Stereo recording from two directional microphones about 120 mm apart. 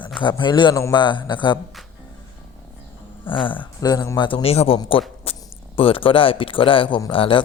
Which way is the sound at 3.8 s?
30° left (ahead or behind).